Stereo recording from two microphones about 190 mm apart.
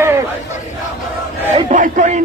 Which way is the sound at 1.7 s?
45° right (ahead or behind).